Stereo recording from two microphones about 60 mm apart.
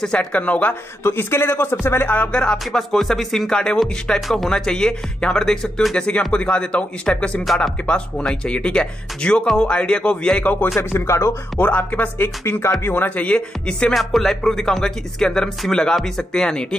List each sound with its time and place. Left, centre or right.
0.2 s speech: left
1.0 s speech: left
2.0 s speech: left
2.7 s speech: centre
3.8 s speech: centre
5.9 s speech: centre
7.4 s speech: centre
7.8 s speech: centre
10.4 s speech: left
10.8 s speech: left
11.6 s speech: left
12.2 s speech: left
13.2 s speech: centre
13.9 s speech: centre